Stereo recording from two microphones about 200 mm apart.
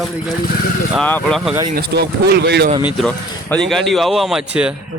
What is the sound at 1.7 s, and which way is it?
Speech, 55° right (ahead or behind).